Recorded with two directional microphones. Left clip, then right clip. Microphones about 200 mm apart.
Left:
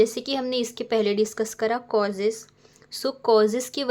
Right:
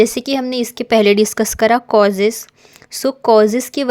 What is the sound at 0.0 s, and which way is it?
A woman's voice, 40° right (ahead or behind).